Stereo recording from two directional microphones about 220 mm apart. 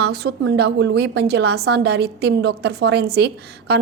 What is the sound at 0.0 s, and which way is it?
A woman's voice, 50° right (ahead or behind).